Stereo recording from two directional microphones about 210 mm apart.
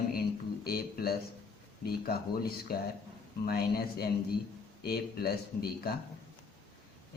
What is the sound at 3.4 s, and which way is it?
A man's voice, 50° left (ahead or behind).